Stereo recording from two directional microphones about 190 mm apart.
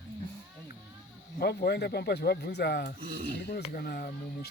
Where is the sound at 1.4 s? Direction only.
55° left (ahead or behind).